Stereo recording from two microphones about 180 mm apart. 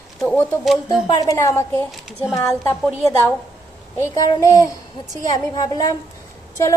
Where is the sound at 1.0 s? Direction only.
20° left (ahead or behind).